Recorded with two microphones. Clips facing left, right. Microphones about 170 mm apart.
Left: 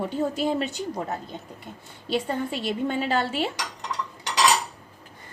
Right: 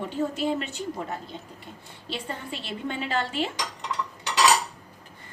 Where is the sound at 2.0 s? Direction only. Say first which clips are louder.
Left 8 dB; 45° left (ahead or behind).